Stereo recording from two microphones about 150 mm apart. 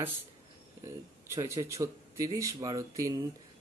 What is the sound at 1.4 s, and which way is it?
Speech, 20° right (ahead or behind).